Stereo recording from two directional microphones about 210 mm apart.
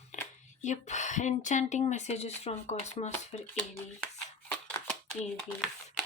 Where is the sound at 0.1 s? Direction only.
35° left (ahead or behind).